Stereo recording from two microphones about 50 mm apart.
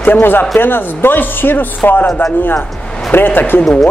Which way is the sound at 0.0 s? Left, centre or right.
Left.